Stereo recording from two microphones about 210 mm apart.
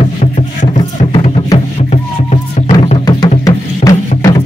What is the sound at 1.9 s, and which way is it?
Music, 35° left (ahead or behind).